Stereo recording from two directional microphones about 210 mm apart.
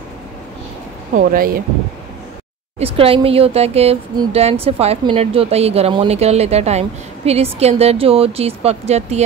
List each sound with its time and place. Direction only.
1.1 s speech: 40° right (ahead or behind)
2.8 s speech: 25° right (ahead or behind)